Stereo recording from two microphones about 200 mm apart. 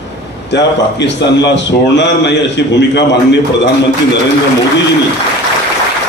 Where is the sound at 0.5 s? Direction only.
60° left (ahead or behind).